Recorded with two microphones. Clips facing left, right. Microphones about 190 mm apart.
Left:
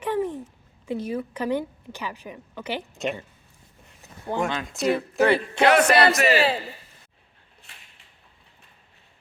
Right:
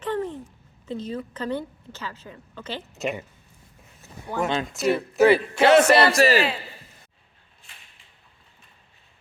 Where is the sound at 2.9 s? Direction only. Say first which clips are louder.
Right 2 dB; centre (ahead or behind).